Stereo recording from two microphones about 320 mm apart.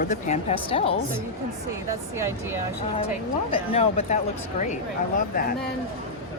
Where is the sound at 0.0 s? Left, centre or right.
Left.